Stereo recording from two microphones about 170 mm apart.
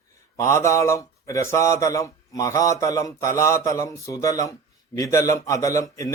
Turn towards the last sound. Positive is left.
turn(degrees=20)  # may be behind; listen again after turning